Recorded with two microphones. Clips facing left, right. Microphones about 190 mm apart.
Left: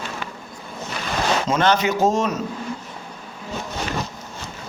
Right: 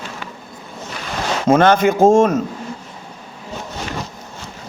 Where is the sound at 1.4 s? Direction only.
55° right (ahead or behind).